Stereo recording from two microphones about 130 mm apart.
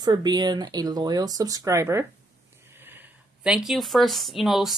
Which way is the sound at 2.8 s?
15° right (ahead or behind).